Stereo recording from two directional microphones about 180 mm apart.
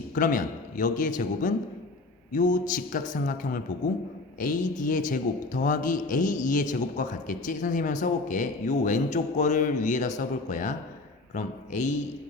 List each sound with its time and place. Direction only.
0.1 s a man's voice: 45° left (ahead or behind)